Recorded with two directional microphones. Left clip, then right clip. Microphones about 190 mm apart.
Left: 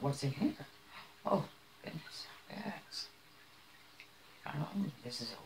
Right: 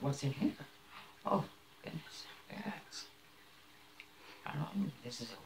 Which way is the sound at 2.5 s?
10° left (ahead or behind).